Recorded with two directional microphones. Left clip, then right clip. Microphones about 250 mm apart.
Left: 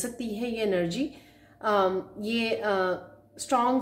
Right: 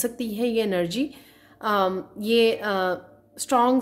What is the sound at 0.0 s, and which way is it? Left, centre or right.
Speech, right.